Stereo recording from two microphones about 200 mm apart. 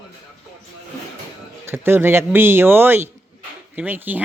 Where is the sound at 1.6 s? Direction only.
10° right (ahead or behind).